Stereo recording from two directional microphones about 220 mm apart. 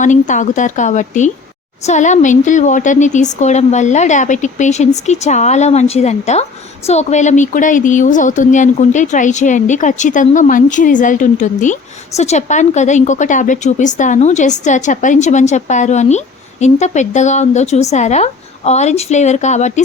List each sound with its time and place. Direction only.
0.0 s a woman's voice: 35° left (ahead or behind)